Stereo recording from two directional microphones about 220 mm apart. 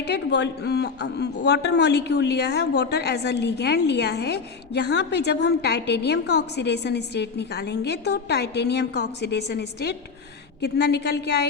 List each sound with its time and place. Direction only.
0.0 s speech: 50° left (ahead or behind)